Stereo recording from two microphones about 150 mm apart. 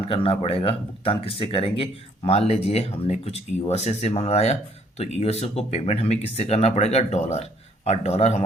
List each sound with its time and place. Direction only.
0.0 s speech: 40° left (ahead or behind)